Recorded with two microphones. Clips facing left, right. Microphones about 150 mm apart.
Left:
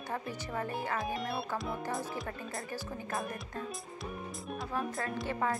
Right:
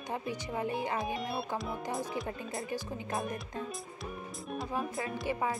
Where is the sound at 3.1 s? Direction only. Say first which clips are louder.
Right 2 dB; centre (ahead or behind).